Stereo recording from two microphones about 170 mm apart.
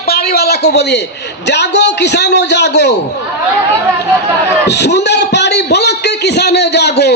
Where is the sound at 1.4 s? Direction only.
90° left.